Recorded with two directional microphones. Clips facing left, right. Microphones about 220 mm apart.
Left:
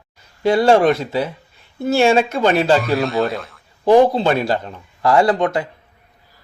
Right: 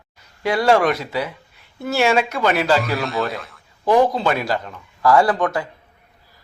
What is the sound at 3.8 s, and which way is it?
Speech, 30° left (ahead or behind).